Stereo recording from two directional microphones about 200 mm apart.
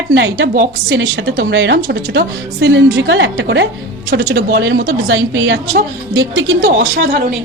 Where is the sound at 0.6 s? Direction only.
60° right (ahead or behind).